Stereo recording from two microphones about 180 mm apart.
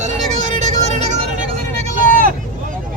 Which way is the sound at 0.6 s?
40° right (ahead or behind).